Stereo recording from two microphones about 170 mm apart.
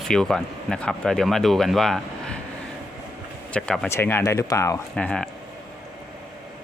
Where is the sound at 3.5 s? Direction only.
5° left (ahead or behind).